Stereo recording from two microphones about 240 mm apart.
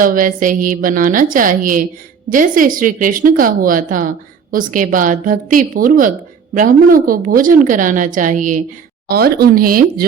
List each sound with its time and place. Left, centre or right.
0.0 s a woman's voice: right